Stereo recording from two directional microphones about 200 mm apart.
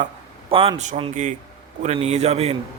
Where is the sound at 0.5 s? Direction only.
25° right (ahead or behind).